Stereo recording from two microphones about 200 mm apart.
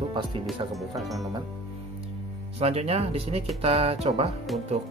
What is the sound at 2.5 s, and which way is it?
Speech, 30° right (ahead or behind).